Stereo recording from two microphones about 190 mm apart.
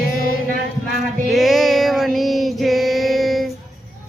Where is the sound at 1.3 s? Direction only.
Centre (ahead or behind).